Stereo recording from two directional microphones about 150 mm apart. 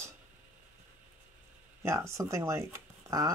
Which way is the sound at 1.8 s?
20° right (ahead or behind).